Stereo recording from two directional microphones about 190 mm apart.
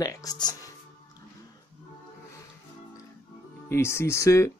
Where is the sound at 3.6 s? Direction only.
15° left (ahead or behind).